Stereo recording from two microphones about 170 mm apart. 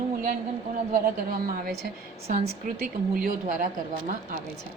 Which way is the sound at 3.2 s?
55° right (ahead or behind).